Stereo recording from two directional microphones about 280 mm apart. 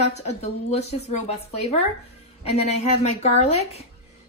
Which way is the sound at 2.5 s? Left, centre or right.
Left.